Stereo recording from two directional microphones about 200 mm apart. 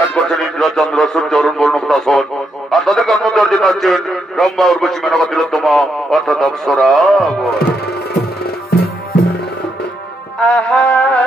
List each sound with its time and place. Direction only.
0.1 s speech: centre (ahead or behind)
7.5 s music: 50° left (ahead or behind)
10.4 s music: 5° left (ahead or behind)